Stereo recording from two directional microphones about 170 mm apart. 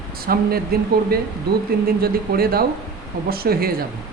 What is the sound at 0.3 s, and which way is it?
Speech, 65° right (ahead or behind).